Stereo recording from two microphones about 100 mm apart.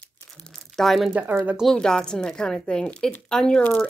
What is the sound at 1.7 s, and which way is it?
Speech, 5° left (ahead or behind).